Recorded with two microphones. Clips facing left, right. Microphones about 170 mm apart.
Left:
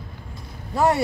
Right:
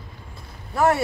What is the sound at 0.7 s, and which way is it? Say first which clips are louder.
Speech: even; 20° left (ahead or behind).